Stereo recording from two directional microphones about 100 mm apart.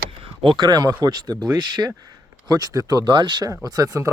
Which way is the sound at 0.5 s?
40° right (ahead or behind).